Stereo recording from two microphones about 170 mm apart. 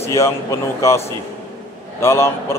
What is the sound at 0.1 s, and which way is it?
Speech, 15° left (ahead or behind).